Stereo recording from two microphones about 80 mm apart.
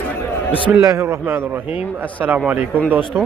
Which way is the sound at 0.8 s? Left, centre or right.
Right.